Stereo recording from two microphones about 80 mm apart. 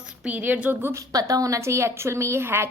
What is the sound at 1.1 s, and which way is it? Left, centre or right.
A woman's voice, right.